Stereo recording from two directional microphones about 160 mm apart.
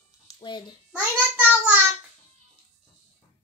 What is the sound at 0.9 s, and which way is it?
Speech, 10° right (ahead or behind).